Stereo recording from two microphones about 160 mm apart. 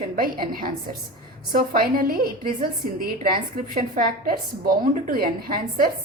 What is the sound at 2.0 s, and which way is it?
A woman's voice, 65° right (ahead or behind).